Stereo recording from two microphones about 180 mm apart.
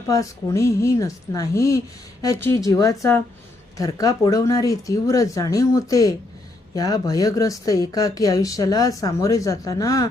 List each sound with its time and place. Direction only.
0.1 s a woman's voice: 15° left (ahead or behind)